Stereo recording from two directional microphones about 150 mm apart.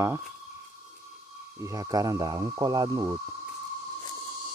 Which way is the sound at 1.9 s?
25° right (ahead or behind).